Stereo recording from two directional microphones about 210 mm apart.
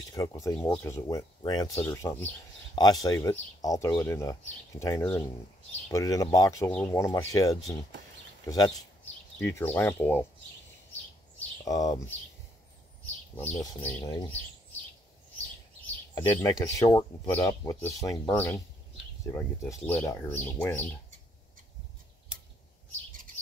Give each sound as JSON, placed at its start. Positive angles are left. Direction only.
{"t": 0.1, "sound": "speech", "side_deg": 15}
{"t": 10.9, "sound": "a sound", "side_deg": 10}
{"t": 13.4, "sound": "speech", "side_deg": 10}
{"t": 16.2, "sound": "speech", "side_deg": 15}